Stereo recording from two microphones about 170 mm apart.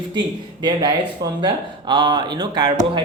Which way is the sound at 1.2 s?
25° right (ahead or behind).